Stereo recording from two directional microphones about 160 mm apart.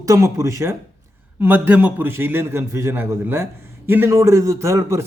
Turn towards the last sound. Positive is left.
turn(degrees=-20)  # may be behind; listen again after turning